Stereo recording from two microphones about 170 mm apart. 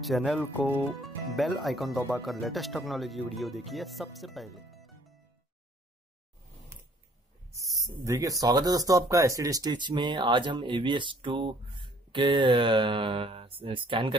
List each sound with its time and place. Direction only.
0.0 s speech: centre (ahead or behind)
7.5 s speech: 20° right (ahead or behind)